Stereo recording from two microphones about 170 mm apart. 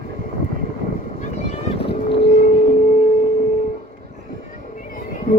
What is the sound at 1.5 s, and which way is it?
Boat, 35° left (ahead or behind).